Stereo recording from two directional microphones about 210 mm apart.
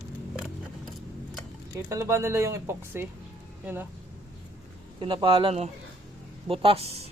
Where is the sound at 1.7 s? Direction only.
15° right (ahead or behind).